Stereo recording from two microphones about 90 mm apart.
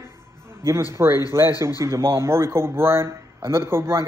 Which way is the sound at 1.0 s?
25° right (ahead or behind).